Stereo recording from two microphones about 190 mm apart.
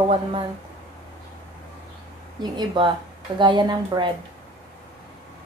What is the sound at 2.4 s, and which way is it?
A woman's voice, 25° right (ahead or behind).